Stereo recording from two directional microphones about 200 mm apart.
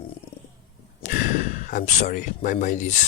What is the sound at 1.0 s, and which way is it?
Speech, 40° left (ahead or behind).